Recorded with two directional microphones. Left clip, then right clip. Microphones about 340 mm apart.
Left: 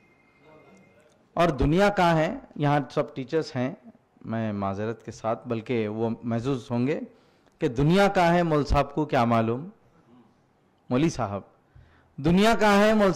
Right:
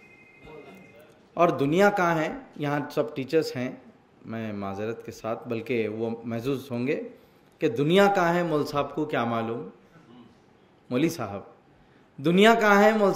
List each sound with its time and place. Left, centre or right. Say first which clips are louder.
1.3 s speech: right 1 dB; left
10.9 s speech: left 1 dB; left